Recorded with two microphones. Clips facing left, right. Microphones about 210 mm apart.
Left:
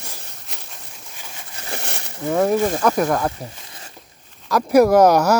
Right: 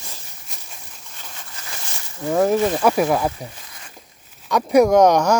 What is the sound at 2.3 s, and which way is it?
Speech, centre (ahead or behind).